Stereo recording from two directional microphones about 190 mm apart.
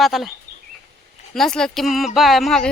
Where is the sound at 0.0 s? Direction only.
Centre (ahead or behind).